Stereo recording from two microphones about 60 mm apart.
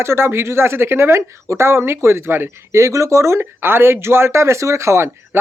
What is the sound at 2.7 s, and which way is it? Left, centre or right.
Speech, right.